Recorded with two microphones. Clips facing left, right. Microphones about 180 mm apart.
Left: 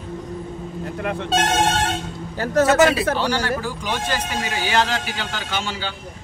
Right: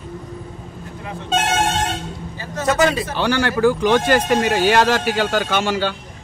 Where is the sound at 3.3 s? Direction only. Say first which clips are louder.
Right 7 dB; 65° right (ahead or behind).